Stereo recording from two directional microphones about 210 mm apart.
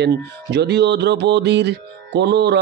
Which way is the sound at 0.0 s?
55° right (ahead or behind).